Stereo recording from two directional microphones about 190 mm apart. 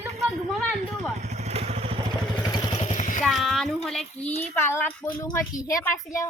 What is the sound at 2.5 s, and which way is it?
Vehicle, 25° left (ahead or behind).